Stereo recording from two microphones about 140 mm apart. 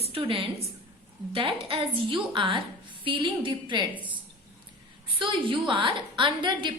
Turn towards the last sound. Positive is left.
turn(degrees=-35)  # may be behind; listen again after turning